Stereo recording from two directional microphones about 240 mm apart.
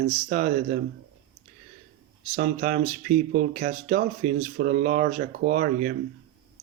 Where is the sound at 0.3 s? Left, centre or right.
Right.